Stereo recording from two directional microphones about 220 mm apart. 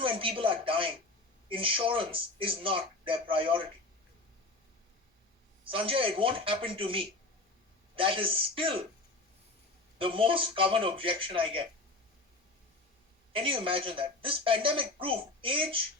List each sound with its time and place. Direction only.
0.0 s a woman's voice: 25° right (ahead or behind)
5.6 s a woman's voice: 25° right (ahead or behind)
10.0 s a woman's voice: 25° right (ahead or behind)
13.3 s a woman's voice: 25° right (ahead or behind)